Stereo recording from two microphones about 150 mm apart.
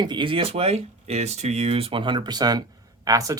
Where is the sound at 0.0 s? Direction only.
30° right (ahead or behind).